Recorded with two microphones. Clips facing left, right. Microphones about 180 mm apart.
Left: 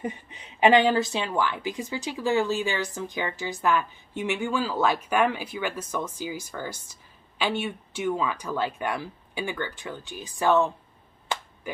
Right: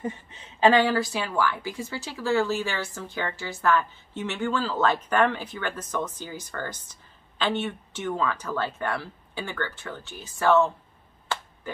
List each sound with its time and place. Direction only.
0.0 s a woman's voice: 15° left (ahead or behind)
11.3 s finger snapping: 15° left (ahead or behind)
11.7 s a sound: 15° left (ahead or behind)